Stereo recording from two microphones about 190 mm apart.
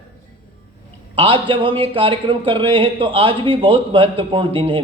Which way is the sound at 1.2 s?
25° right (ahead or behind).